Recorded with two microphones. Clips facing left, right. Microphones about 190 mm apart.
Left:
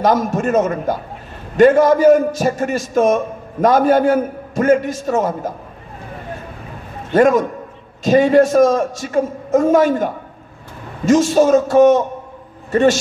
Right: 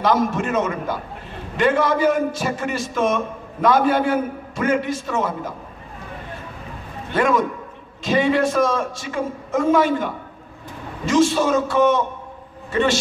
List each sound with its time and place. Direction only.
0.0 s a man's voice: 45° left (ahead or behind)
7.1 s a man's voice: 45° left (ahead or behind)